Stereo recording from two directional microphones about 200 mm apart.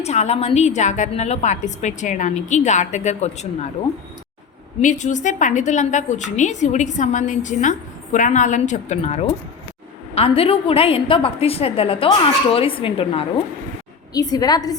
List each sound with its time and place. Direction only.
0.0 s a woman's voice: 35° left (ahead or behind)
4.8 s a woman's voice: 35° left (ahead or behind); by 14.8 s 20° left (ahead or behind)